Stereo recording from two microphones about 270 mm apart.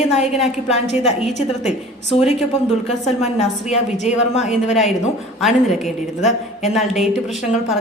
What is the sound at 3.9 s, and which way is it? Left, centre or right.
Speech, left.